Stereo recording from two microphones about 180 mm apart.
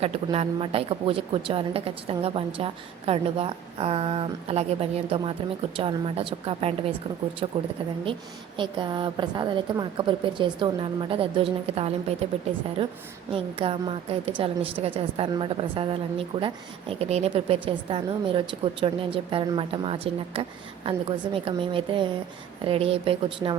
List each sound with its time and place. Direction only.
0.0 s a woman's voice: 35° right (ahead or behind)
8.5 s a woman's voice: 25° right (ahead or behind)